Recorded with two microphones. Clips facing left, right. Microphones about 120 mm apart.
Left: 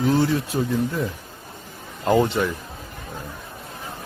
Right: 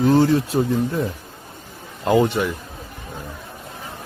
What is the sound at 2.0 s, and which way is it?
Speech, 15° right (ahead or behind).